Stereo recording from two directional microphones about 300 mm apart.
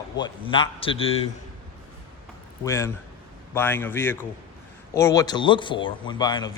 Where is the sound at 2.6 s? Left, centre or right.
Centre.